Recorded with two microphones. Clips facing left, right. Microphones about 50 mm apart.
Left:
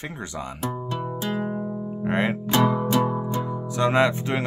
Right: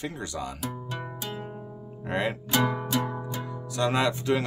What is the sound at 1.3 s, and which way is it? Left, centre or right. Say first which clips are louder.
Music: left 10 dB; left.